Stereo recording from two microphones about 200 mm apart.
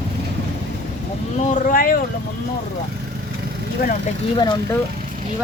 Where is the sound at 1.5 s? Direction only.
45° left (ahead or behind).